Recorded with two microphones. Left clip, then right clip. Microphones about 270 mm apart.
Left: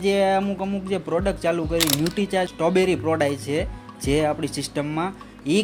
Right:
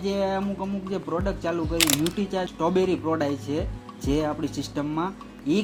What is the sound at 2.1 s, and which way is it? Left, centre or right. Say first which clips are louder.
Speech: left 5 dB; left.